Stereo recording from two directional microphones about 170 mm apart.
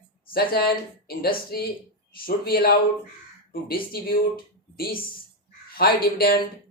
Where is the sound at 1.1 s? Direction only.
65° left (ahead or behind).